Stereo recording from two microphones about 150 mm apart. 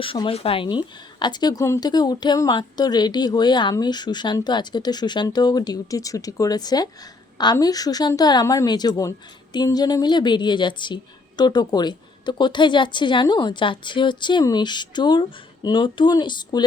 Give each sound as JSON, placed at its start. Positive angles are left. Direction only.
{"t": 0.0, "sound": "a woman's voice", "side_deg": 35}